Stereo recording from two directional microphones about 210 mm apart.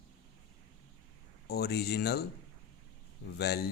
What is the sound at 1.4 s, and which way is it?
Speech, 50° left (ahead or behind).